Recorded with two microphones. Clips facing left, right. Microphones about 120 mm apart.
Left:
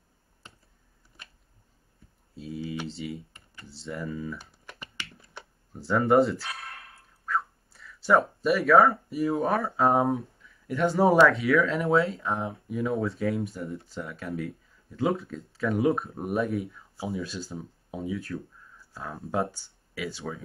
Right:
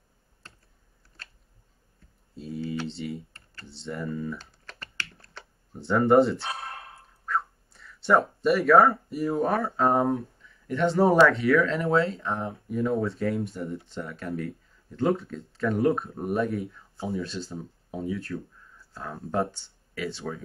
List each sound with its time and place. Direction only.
0.4 s computer keyboard: 15° left (ahead or behind)
1.2 s a sound: 15° left (ahead or behind)
2.3 s speech: centre (ahead or behind)
2.6 s typing: 15° left (ahead or behind)
2.9 s speech: centre (ahead or behind)
4.4 s computer keyboard: 15° left (ahead or behind)
5.4 s a sound: 15° left (ahead or behind)
5.8 s speech: centre (ahead or behind)
6.3 s a sound: 25° right (ahead or behind)
7.2 s speech: centre (ahead or behind)